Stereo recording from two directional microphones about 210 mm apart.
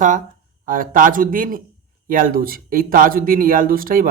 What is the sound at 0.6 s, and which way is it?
Speech, 40° right (ahead or behind).